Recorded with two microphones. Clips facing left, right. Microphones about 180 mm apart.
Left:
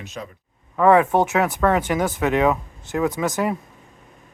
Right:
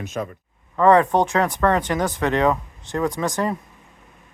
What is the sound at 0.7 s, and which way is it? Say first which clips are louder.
Speech: even; 5° left (ahead or behind).